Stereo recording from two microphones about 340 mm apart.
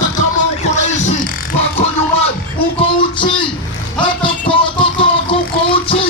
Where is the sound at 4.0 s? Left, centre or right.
Centre.